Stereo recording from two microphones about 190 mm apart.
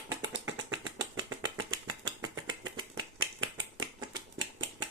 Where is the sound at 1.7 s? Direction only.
20° right (ahead or behind).